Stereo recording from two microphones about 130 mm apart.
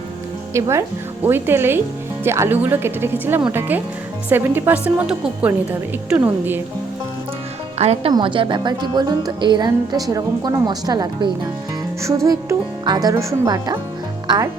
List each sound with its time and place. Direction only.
0.5 s speech: 20° right (ahead or behind)
7.8 s speech: 55° right (ahead or behind)
8.1 s speech: 40° right (ahead or behind); by 14.5 s 25° right (ahead or behind)